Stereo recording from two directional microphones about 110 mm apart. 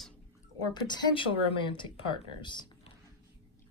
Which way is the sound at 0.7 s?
45° left (ahead or behind).